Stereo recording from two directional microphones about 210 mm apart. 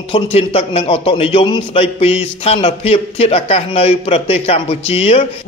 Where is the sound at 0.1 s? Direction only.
25° left (ahead or behind).